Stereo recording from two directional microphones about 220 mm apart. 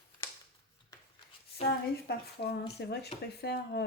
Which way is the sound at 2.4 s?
40° left (ahead or behind).